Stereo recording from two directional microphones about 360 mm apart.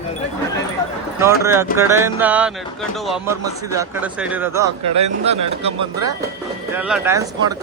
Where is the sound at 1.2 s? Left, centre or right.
Centre.